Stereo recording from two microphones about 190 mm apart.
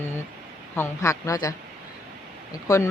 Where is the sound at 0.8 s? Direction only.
15° left (ahead or behind).